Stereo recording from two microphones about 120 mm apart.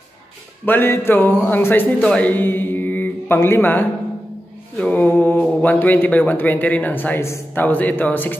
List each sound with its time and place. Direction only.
0.7 s speech: 20° left (ahead or behind)